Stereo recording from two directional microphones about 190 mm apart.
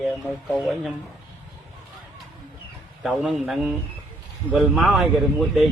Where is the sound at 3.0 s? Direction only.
Centre (ahead or behind).